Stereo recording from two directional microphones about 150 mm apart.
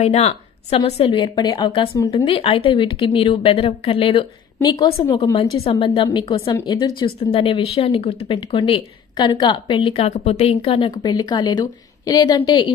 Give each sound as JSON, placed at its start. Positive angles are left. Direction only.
{"t": 0.0, "sound": "a woman's voice", "side_deg": 45}
{"t": 4.6, "sound": "a woman's voice", "side_deg": 25}
{"t": 5.1, "sound": "speech", "side_deg": 40}
{"t": 7.2, "sound": "speech", "side_deg": 40}